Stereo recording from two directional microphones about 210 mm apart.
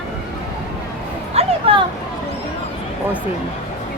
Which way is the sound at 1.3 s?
25° right (ahead or behind).